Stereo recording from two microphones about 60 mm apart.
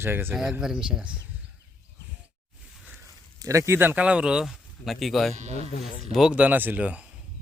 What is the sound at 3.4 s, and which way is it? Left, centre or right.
Speech, right.